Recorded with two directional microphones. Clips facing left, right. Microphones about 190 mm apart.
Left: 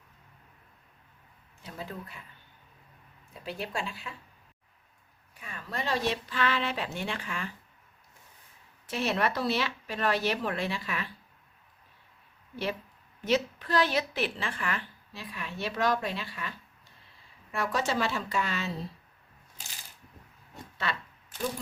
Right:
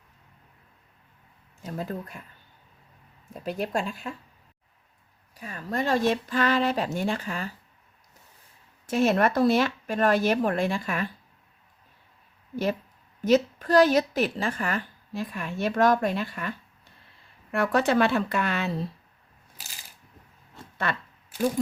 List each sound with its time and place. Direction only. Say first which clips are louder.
1.6 s speech: right 7 dB; 45° right (ahead or behind)
3.3 s a woman's voice: right 7 dB; 45° right (ahead or behind)
5.3 s a woman's voice: right 7 dB; 40° right (ahead or behind)
8.9 s a woman's voice: right 7 dB; 45° right (ahead or behind)
13.2 s a woman's voice: right 7 dB; 45° right (ahead or behind)
20.9 s a woman's voice: right 4 dB; 50° right (ahead or behind)